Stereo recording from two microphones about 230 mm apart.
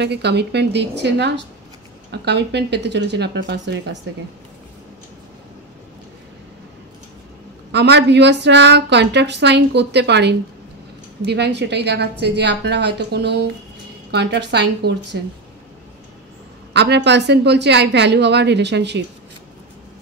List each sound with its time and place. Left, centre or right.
0.0 s speech: right
7.7 s speech: right
16.7 s speech: right